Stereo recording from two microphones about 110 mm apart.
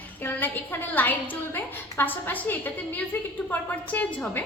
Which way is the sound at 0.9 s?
15° left (ahead or behind).